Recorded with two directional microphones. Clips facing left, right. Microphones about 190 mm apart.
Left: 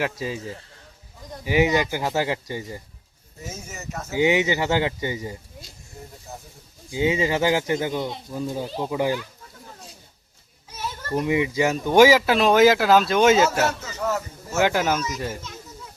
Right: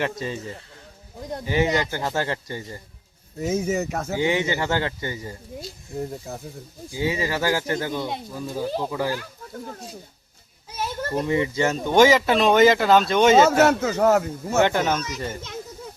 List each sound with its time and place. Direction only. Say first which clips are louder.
0.0 s speech: even; 5° left (ahead or behind)
3.4 s speech: right 13 dB; 60° right (ahead or behind)
4.1 s speech: left 4 dB; 15° left (ahead or behind)
6.3 s speech: right 5 dB; 60° right (ahead or behind)
6.9 s speech: left 3 dB; 20° left (ahead or behind)
11.1 s speech: left 2 dB; 15° left (ahead or behind)
13.4 s speech: right 5 dB; 55° right (ahead or behind)
14.6 s speech: even; 5° left (ahead or behind)